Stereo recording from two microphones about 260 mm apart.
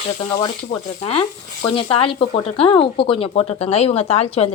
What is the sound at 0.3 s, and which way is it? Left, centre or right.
Speech, centre.